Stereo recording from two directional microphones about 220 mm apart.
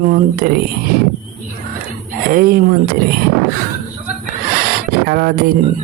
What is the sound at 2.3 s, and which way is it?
Speech, 40° right (ahead or behind).